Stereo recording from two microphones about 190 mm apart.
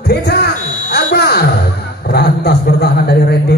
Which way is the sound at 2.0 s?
55° left (ahead or behind).